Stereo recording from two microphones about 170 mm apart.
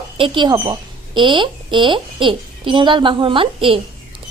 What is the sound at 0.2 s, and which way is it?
A woman's voice, 25° right (ahead or behind).